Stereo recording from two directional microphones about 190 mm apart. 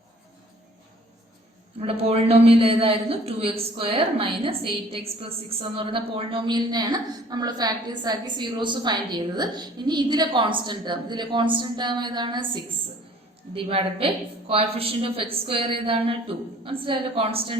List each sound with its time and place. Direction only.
1.8 s a man's voice: 30° right (ahead or behind)
13.5 s a man's voice: 30° right (ahead or behind)